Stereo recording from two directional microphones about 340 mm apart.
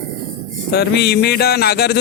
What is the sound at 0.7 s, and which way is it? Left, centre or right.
Speech, left.